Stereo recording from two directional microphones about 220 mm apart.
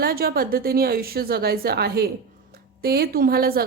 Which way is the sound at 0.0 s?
45° right (ahead or behind).